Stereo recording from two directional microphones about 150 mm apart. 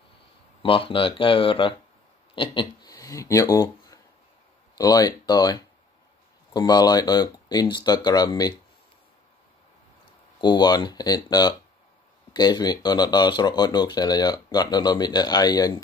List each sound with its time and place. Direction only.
0.6 s speech: 35° left (ahead or behind)
10.4 s speech: 30° left (ahead or behind)